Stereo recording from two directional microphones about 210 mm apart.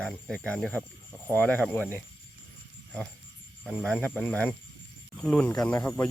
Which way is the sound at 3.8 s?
5° left (ahead or behind).